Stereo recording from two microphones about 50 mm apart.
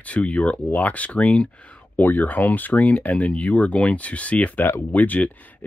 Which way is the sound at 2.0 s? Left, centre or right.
Left.